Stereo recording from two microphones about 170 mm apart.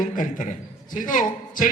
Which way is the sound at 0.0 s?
50° left (ahead or behind).